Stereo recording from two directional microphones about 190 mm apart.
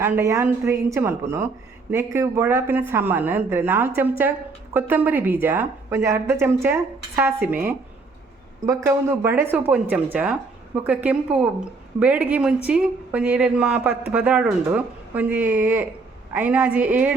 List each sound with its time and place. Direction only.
0.0 s a woman's voice: 15° right (ahead or behind)